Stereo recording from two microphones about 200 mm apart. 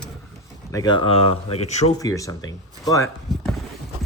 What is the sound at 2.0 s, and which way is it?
Speech, 15° left (ahead or behind).